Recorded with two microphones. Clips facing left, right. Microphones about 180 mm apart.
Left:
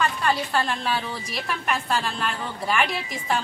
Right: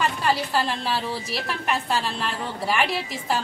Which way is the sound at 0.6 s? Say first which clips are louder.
Even; 30° right (ahead or behind).